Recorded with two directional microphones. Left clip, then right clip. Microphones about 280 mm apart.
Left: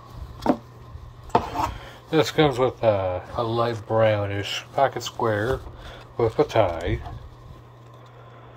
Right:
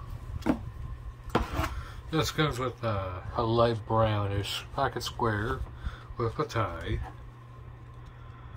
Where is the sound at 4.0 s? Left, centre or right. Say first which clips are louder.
Left 8 dB; centre.